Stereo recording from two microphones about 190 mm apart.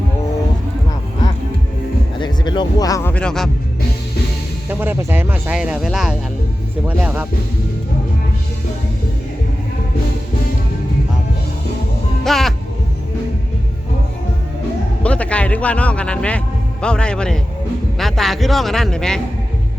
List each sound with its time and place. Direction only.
2.1 s music: 25° left (ahead or behind); by 3.5 s 5° left (ahead or behind)
4.7 s speech: 10° right (ahead or behind)
12.2 s music: centre (ahead or behind)
15.0 s speech: 5° left (ahead or behind)